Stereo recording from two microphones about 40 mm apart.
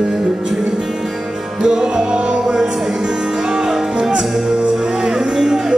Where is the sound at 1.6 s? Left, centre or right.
Centre.